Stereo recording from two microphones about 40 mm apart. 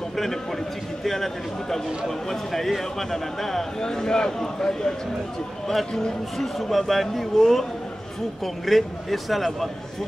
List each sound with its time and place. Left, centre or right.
0.1 s a sound: centre
1.0 s a man's voice: centre
8.6 s speech: centre